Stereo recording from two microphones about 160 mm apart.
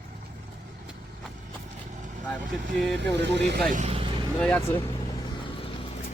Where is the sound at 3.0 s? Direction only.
90° right.